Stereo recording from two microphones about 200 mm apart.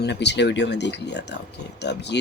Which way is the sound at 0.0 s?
60° left (ahead or behind).